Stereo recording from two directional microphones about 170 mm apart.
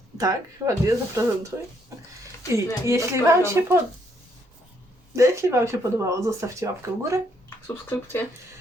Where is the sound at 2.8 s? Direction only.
15° right (ahead or behind).